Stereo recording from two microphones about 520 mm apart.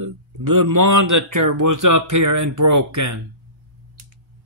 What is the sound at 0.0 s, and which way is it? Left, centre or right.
A man's voice, right.